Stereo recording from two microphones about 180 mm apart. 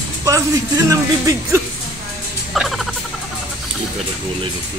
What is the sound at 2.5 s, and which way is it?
Rodents, centre (ahead or behind).